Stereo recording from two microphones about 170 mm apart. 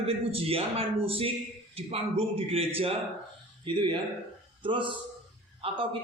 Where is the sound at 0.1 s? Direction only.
35° right (ahead or behind).